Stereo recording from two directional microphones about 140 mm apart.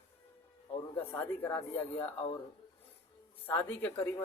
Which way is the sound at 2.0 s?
45° left (ahead or behind).